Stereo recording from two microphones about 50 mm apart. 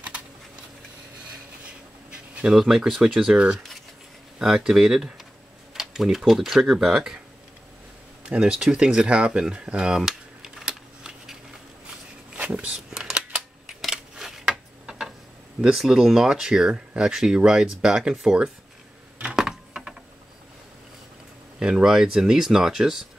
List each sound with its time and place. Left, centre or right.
2.0 s bee: right
2.5 s speech: centre
3.3 s speech: right
4.4 s speech: centre
8.3 s speech: centre
12.4 s a sound: right
12.9 s camera: centre
13.7 s a sound: centre
16.1 s speech: centre
19.3 s typing: centre
21.5 s speech: centre